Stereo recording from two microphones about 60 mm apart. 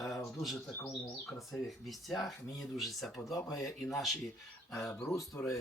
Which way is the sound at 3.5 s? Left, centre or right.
Left.